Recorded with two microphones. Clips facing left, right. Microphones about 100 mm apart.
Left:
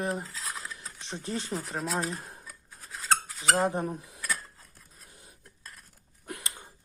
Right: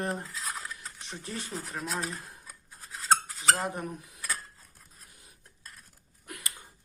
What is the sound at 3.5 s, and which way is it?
Cutlery, 30° left (ahead or behind).